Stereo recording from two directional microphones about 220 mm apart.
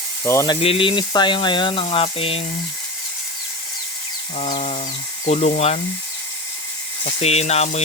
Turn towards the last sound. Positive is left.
turn(degrees=30)  # may be behind; listen again after turning